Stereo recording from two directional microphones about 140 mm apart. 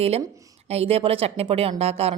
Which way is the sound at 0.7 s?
45° right (ahead or behind).